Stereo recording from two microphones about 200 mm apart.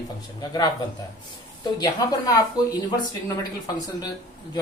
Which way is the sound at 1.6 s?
20° left (ahead or behind).